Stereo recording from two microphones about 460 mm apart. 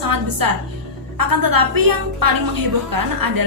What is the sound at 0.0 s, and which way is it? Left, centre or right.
A woman's voice, right.